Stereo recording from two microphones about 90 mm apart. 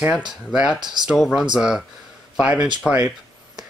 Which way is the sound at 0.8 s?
55° right (ahead or behind).